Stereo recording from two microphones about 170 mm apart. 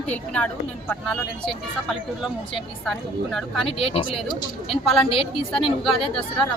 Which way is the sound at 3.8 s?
35° left (ahead or behind).